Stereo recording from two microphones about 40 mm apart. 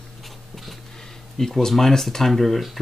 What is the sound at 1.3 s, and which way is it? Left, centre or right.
Speech, centre.